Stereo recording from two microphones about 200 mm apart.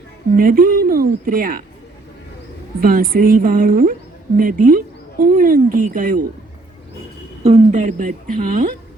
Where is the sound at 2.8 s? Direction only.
45° right (ahead or behind).